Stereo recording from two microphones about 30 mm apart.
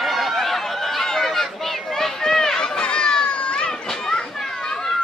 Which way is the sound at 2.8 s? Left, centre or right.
Left.